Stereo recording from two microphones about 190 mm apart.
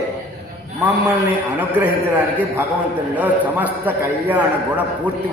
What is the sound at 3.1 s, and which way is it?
A man's voice, 10° right (ahead or behind).